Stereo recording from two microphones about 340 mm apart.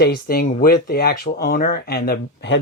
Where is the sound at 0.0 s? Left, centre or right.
Left.